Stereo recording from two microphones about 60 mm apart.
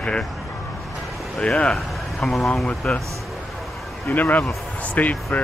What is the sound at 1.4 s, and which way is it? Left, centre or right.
Speech, centre.